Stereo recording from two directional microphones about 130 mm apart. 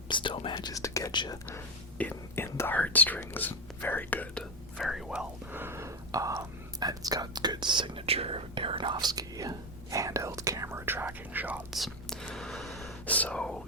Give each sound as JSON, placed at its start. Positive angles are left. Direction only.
{"t": 0.1, "sound": "whispering", "side_deg": 40}
{"t": 1.1, "sound": "speech", "side_deg": 35}
{"t": 1.5, "sound": "speech", "side_deg": 15}
{"t": 4.8, "sound": "whispering", "side_deg": 0}
{"t": 11.7, "sound": "whispering", "side_deg": 0}
{"t": 13.1, "sound": "whispering", "side_deg": 10}